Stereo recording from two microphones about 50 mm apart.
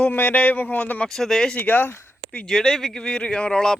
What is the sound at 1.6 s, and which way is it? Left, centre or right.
Speech, left.